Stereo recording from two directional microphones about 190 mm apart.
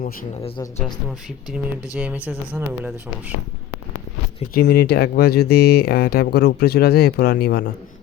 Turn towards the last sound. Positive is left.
turn(degrees=50)  # may be behind; listen again after turning